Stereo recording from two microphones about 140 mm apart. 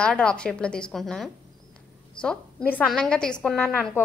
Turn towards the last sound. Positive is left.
turn(degrees=10)  # may be behind; listen again after turning